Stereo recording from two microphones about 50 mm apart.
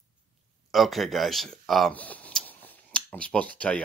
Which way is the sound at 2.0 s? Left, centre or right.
Left.